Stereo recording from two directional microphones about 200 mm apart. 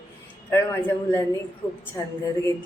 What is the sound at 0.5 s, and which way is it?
A man's voice, 10° left (ahead or behind).